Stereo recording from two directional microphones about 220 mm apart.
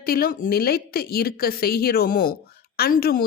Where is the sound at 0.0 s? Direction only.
45° left (ahead or behind).